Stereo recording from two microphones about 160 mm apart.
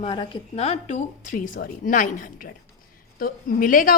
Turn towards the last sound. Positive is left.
turn(degrees=60)  # may be behind; listen again after turning